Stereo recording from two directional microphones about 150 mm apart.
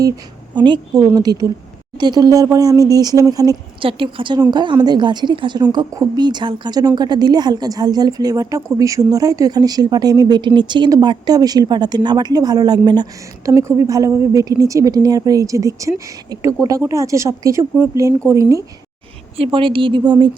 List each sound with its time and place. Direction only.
0.5 s a woman's voice: 30° right (ahead or behind)
3.8 s a woman's voice: 35° right (ahead or behind)
13.5 s a woman's voice: 20° right (ahead or behind)
19.4 s a woman's voice: 35° right (ahead or behind)